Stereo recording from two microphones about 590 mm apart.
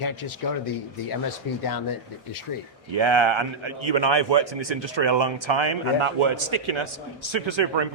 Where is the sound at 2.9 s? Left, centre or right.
Right.